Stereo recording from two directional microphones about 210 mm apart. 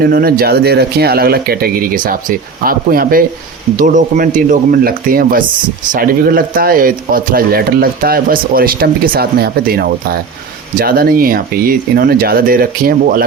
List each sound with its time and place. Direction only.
0.0 s speech: 45° right (ahead or behind)